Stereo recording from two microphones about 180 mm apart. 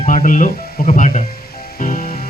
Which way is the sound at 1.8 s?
45° left (ahead or behind).